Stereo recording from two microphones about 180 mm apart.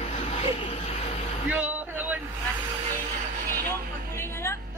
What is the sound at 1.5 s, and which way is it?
Vehicle, 10° right (ahead or behind).